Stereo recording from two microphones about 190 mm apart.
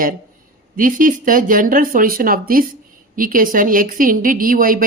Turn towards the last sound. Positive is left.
turn(degrees=-45)  # may be behind; listen again after turning